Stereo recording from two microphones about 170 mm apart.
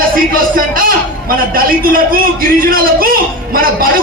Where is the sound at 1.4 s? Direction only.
55° right (ahead or behind).